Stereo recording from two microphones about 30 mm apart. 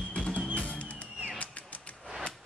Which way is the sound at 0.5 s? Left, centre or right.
Left.